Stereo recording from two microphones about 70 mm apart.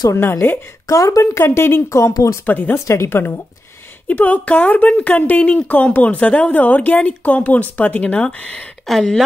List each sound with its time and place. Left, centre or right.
0.1 s speech: left
0.8 s a woman's voice: left
1.4 s speech: left
2.4 s a woman's voice: left
2.9 s a woman's voice: left; by 9.2 s centre